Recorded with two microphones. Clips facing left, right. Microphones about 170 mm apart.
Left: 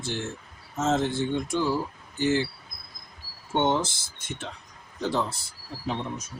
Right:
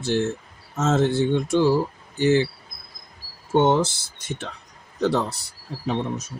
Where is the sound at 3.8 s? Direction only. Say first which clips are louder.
Right 5 dB; 70° right (ahead or behind).